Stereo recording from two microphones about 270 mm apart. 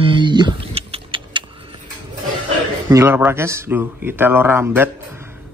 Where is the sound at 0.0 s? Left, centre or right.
Centre.